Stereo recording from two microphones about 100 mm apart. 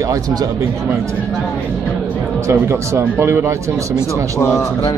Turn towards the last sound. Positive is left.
turn(degrees=25)  # may be behind; listen again after turning